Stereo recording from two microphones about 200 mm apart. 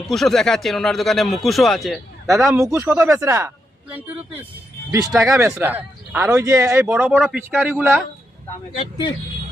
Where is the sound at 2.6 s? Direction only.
15° right (ahead or behind).